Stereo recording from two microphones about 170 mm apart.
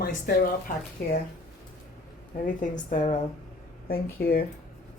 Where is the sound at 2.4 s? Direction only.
50° left (ahead or behind).